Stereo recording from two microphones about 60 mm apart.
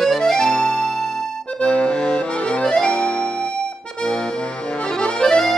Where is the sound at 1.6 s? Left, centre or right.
Centre.